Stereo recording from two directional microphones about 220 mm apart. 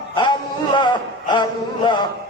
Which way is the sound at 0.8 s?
20° left (ahead or behind).